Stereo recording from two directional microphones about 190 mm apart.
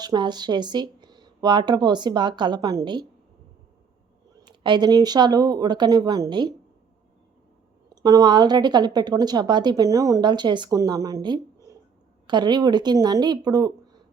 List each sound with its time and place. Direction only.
0.0 s a woman's voice: 20° right (ahead or behind)
4.4 s a woman's voice: 25° right (ahead or behind)
8.0 s a woman's voice: 20° right (ahead or behind)